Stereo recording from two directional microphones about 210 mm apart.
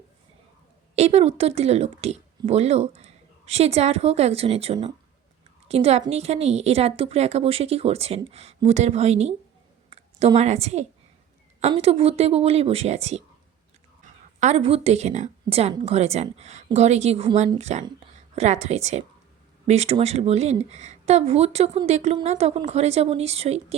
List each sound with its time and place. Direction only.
0.9 s a woman's voice: 30° right (ahead or behind)